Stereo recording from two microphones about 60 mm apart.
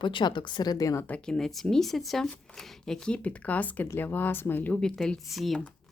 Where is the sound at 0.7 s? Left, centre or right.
Left.